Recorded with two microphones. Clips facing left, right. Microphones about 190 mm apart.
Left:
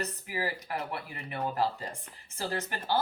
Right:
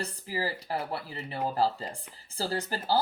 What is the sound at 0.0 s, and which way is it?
Speech, 30° right (ahead or behind).